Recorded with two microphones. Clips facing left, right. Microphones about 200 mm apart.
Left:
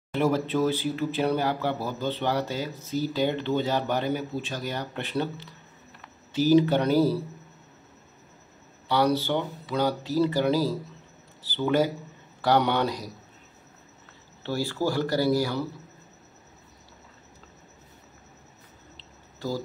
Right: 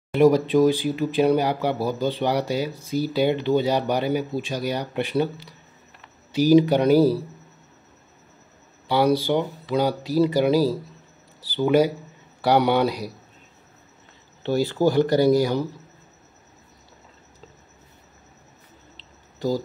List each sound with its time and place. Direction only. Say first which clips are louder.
0.1 s speech: right 8 dB; 15° right (ahead or behind)
8.8 s speech: right 4 dB; 10° right (ahead or behind)
14.4 s speech: right 7 dB; 20° right (ahead or behind)